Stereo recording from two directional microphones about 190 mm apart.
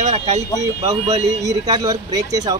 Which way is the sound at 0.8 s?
15° right (ahead or behind).